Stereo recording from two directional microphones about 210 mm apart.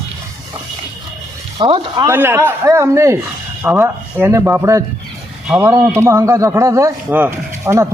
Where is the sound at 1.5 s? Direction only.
25° right (ahead or behind).